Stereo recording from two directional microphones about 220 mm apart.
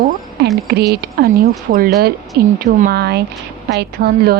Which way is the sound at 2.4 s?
40° right (ahead or behind).